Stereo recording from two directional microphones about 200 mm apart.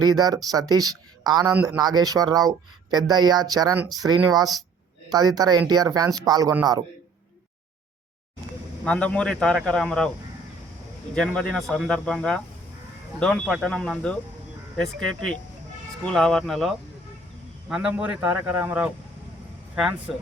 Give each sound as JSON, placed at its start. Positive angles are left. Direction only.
{"t": 0.0, "sound": "speech", "side_deg": -20}
{"t": 8.8, "sound": "speech", "side_deg": 5}
{"t": 11.1, "sound": "a man's voice", "side_deg": 5}